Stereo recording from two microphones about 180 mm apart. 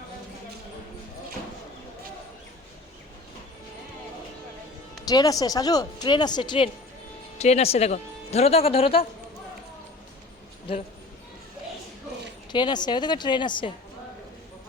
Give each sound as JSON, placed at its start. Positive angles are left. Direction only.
{"t": 5.0, "sound": "speech", "side_deg": 20}
{"t": 7.3, "sound": "speech", "side_deg": 40}
{"t": 12.5, "sound": "speech", "side_deg": 25}